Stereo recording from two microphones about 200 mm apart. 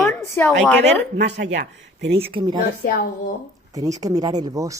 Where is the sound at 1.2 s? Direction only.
60° right (ahead or behind).